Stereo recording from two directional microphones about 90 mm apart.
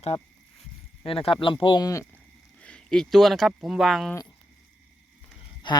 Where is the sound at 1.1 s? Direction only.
90° left; by 1.8 s 70° left (ahead or behind).